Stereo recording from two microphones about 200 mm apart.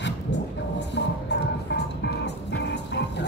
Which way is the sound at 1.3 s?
60° left (ahead or behind).